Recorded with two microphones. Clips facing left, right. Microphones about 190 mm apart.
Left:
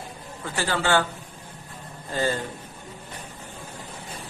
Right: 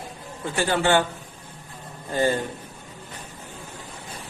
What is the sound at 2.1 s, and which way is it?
Speech, 15° right (ahead or behind).